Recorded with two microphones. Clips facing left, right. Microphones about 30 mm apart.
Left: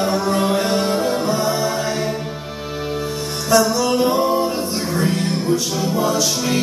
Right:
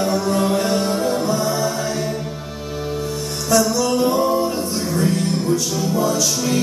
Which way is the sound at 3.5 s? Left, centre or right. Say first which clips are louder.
Left 1 dB; centre.